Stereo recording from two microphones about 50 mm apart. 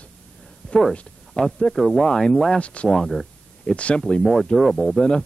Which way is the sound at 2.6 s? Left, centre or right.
Left.